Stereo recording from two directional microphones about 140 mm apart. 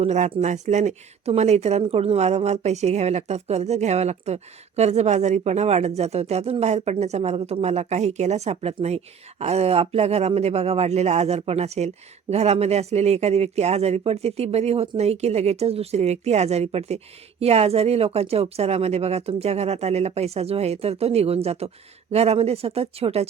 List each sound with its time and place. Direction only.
0.0 s speech: 60° right (ahead or behind)